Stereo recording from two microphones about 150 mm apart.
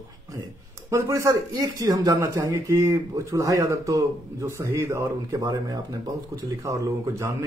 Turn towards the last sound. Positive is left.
turn(degrees=-20)  # may be behind; listen again after turning